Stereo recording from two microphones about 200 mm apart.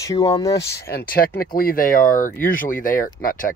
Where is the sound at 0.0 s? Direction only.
20° left (ahead or behind).